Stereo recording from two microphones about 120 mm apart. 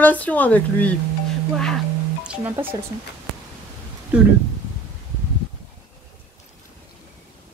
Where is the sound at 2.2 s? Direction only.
10° right (ahead or behind).